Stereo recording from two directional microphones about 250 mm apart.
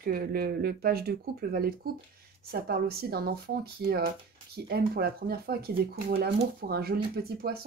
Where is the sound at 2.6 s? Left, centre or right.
Right.